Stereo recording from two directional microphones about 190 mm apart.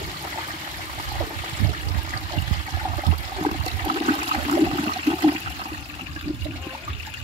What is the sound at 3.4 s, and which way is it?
Toilet flush, 30° right (ahead or behind).